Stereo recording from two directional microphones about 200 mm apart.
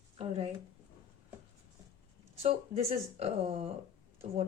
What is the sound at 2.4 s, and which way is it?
Speech, 30° right (ahead or behind).